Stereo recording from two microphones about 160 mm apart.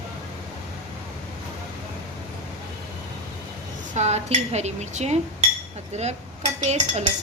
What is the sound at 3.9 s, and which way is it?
Speech, 45° right (ahead or behind).